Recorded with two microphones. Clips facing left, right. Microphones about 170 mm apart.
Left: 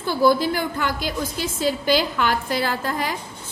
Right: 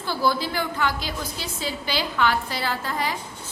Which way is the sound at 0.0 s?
50° left (ahead or behind).